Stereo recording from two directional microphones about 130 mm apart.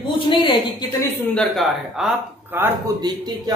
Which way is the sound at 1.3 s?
5° left (ahead or behind).